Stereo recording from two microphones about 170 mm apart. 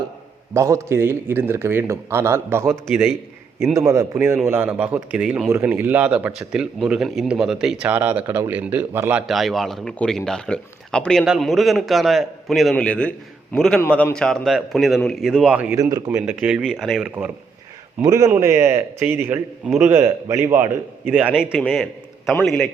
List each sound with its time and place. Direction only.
0.5 s a man's voice: 20° right (ahead or behind)
2.8 s speech: centre (ahead or behind)
3.8 s a man's voice: 20° right (ahead or behind)
9.2 s speech: centre (ahead or behind)
15.7 s a man's voice: 20° right (ahead or behind)
16.0 s a man's voice: 10° right (ahead or behind)
18.0 s a man's voice: 20° right (ahead or behind); by 22.7 s 5° left (ahead or behind)